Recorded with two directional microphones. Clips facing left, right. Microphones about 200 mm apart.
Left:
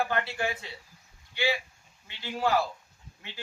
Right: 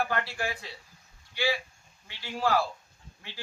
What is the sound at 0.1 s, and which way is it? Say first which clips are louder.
Speech: left 2 dB; 25° left (ahead or behind).